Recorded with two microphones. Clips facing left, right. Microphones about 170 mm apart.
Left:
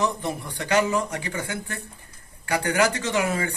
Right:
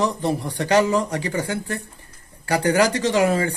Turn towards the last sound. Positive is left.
turn(degrees=-30)  # may be behind; listen again after turning